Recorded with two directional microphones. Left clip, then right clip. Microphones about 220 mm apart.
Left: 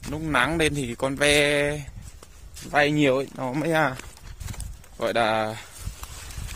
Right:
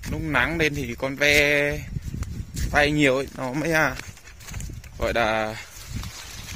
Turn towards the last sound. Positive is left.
turn(degrees=0)  # may be behind; listen again after turning